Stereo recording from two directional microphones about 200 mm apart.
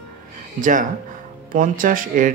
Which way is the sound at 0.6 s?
40° right (ahead or behind).